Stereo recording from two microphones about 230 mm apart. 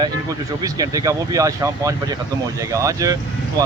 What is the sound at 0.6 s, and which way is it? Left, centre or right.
Speech, centre.